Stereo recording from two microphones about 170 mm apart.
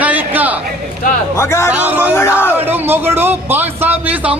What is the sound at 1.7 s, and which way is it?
Speech, 10° right (ahead or behind).